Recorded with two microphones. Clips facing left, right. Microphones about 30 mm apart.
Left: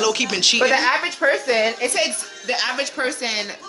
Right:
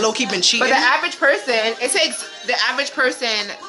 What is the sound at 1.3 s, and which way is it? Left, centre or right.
Speech, right.